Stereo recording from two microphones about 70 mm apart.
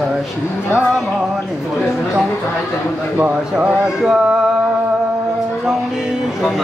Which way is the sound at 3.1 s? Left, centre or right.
Right.